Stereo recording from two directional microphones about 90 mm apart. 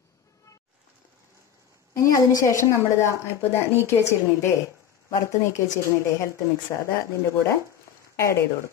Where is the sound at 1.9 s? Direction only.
40° left (ahead or behind).